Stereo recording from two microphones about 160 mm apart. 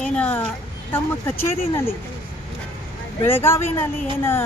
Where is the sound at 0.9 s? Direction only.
15° left (ahead or behind).